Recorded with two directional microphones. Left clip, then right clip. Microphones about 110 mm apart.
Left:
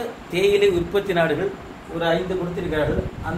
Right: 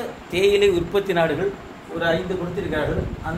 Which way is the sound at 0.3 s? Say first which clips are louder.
Right 1 dB; 55° right (ahead or behind).